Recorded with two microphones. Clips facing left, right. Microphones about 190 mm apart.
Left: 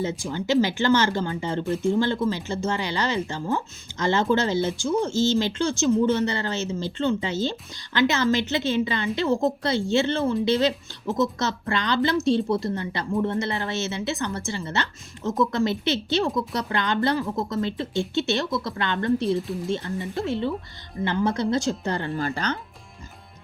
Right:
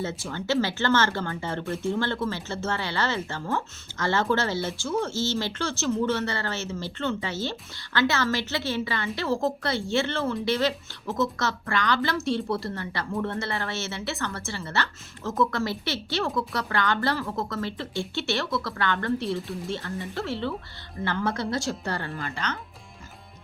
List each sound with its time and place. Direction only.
0.0 s a woman's voice: 15° left (ahead or behind)
22.2 s speech: 35° left (ahead or behind)